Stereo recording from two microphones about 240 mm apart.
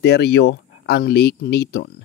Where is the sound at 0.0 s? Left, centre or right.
Left.